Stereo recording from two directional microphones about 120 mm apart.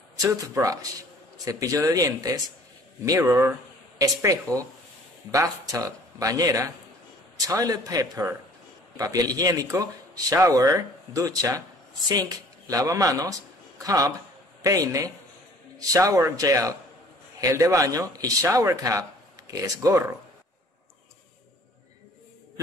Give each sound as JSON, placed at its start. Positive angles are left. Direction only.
{"t": 0.2, "sound": "a man's voice", "side_deg": -30}